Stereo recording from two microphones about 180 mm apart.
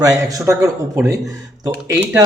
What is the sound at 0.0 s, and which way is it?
Speech, 20° right (ahead or behind).